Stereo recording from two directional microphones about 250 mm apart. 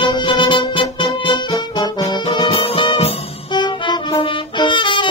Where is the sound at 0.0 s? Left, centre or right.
Centre.